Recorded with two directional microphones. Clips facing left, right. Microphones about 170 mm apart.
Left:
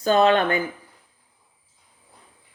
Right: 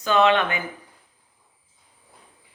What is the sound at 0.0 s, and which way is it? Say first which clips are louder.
Speech: left 2 dB; 40° left (ahead or behind).